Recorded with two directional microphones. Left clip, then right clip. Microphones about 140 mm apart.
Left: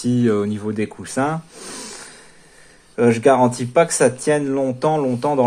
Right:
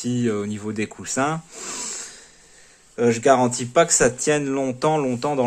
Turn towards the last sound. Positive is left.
turn(degrees=-30)  # may be behind; listen again after turning